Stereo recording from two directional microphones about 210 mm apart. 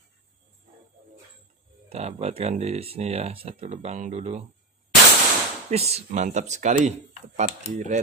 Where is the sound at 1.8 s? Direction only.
30° right (ahead or behind).